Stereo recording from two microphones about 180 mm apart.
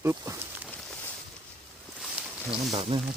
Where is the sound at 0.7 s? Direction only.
10° left (ahead or behind).